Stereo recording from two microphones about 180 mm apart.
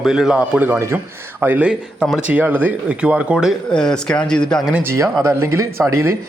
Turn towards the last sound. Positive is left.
turn(degrees=-15)  # may be behind; listen again after turning